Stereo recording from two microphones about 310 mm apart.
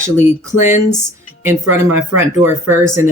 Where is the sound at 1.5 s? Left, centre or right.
Centre.